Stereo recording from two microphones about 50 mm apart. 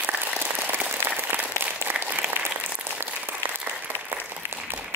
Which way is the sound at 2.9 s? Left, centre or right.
Right.